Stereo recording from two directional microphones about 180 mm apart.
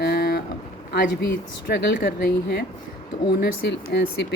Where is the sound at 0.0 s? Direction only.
65° left (ahead or behind).